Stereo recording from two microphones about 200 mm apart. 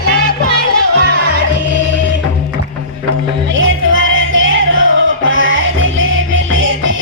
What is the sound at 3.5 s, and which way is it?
Music, 75° right (ahead or behind).